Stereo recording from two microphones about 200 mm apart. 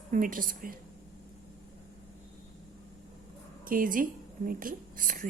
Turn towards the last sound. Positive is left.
turn(degrees=-45)  # may be behind; listen again after turning